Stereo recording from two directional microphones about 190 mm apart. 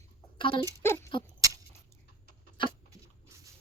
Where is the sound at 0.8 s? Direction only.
15° left (ahead or behind).